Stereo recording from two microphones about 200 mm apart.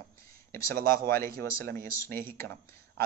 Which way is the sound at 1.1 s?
10° left (ahead or behind).